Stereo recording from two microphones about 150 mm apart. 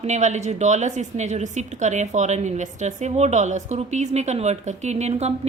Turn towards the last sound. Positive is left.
turn(degrees=-45)  # may be behind; listen again after turning